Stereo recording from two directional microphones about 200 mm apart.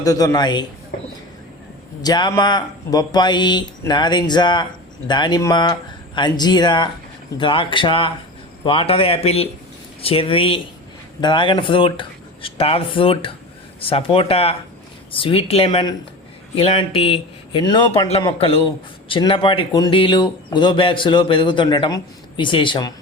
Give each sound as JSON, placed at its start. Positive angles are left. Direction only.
{"t": 0.0, "sound": "speech", "side_deg": 15}
{"t": 2.0, "sound": "speech", "side_deg": 20}